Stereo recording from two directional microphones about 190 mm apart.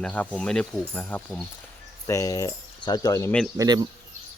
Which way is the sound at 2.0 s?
15° left (ahead or behind).